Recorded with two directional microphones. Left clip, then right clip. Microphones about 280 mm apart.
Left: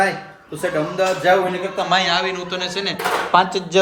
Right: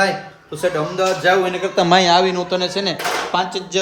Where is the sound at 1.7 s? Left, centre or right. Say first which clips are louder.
Right 6 dB; right; by 2.9 s centre.